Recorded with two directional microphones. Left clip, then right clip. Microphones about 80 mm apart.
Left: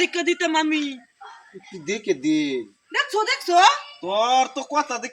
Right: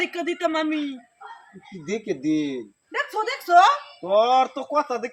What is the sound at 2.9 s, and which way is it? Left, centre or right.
Speech, right.